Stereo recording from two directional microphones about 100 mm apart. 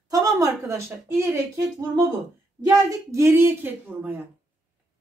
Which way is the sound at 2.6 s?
35° right (ahead or behind).